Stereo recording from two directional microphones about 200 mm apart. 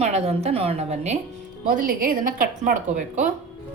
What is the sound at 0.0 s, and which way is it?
A woman's voice, 35° right (ahead or behind).